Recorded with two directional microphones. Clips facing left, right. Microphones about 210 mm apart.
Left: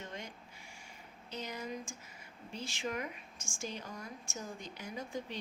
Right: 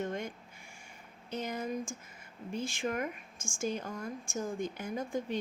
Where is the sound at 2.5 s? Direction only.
50° right (ahead or behind).